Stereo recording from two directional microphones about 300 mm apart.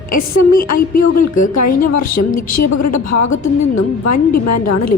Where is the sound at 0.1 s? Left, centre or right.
Left.